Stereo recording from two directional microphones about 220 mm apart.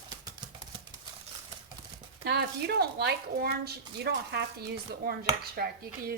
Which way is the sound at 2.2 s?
50° right (ahead or behind).